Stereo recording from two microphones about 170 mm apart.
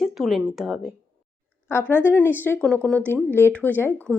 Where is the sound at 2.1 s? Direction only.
10° left (ahead or behind).